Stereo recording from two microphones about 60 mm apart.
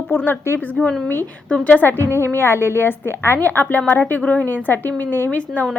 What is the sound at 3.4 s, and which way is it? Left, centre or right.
Speech, left.